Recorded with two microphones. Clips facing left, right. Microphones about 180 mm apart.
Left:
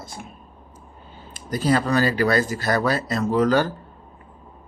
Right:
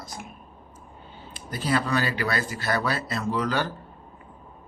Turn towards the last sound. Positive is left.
turn(degrees=45)  # may be behind; listen again after turning